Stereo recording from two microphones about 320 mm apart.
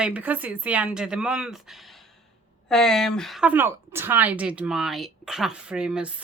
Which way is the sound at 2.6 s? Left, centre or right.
Centre.